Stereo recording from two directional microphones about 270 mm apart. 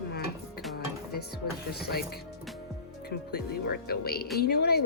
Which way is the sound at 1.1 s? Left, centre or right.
Left.